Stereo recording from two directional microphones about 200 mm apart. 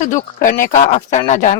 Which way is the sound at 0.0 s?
40° left (ahead or behind).